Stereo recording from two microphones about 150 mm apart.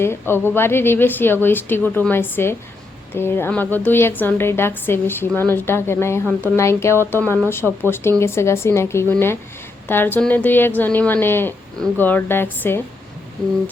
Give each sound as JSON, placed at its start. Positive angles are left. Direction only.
{"t": 0.0, "sound": "a woman's voice", "side_deg": 15}